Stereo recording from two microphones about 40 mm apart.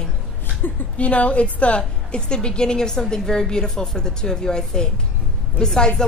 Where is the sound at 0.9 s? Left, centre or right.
Left.